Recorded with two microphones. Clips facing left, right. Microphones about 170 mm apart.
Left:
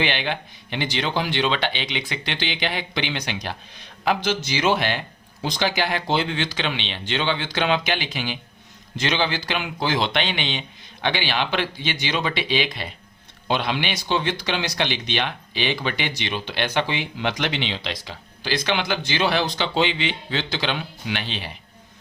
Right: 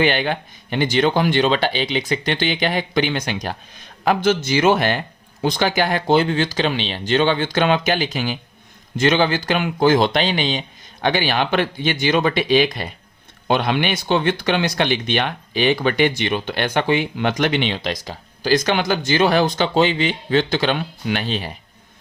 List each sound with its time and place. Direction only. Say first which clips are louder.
0.0 s speech: right 6 dB; 45° right (ahead or behind)